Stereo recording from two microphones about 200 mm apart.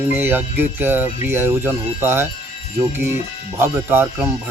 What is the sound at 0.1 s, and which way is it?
Speech, 10° right (ahead or behind).